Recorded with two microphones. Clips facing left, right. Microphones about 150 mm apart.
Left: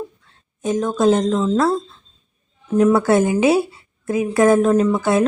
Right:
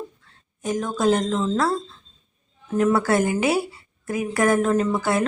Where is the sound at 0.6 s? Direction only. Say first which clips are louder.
Left 5 dB; 20° left (ahead or behind).